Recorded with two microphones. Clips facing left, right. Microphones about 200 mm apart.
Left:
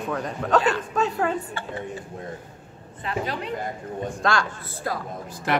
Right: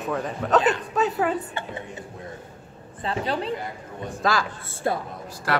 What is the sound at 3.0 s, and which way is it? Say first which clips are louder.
Speech: right 2 dB; 30° right (ahead or behind).